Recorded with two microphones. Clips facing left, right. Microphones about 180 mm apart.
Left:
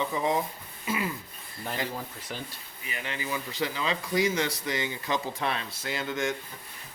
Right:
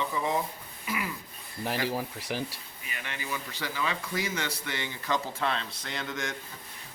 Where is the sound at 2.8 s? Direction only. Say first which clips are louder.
Left 4 dB; 20° left (ahead or behind).